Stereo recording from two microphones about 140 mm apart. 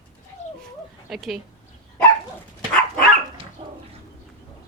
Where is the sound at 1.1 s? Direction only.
5° right (ahead or behind).